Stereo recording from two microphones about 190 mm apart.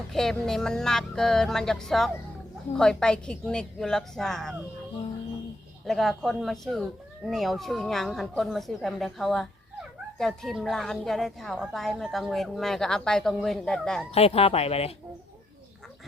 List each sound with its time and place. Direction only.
0.1 s a woman's voice: centre (ahead or behind)
5.8 s a woman's voice: centre (ahead or behind)
14.1 s speech: 30° left (ahead or behind)